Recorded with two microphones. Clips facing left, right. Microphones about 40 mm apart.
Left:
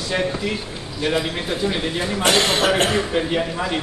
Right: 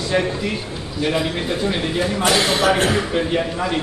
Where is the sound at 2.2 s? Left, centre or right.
Left.